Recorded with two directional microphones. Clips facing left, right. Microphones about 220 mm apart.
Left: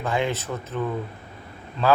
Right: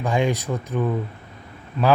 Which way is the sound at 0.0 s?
15° right (ahead or behind).